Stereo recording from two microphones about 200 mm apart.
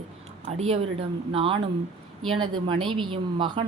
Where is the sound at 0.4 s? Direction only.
30° right (ahead or behind).